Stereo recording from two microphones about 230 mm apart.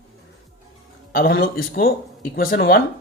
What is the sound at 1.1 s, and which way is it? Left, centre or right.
Speech, left.